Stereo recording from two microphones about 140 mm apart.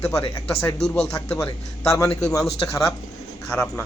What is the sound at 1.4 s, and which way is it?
Speech, 20° left (ahead or behind).